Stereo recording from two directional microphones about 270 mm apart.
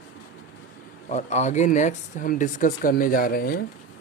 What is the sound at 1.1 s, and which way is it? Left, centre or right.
Speech, left.